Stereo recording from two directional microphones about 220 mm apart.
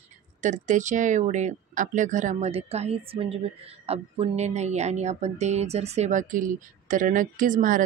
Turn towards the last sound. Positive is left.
turn(degrees=-35)  # may be behind; listen again after turning